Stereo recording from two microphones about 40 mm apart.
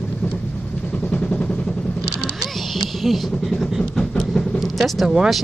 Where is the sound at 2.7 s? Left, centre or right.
Centre.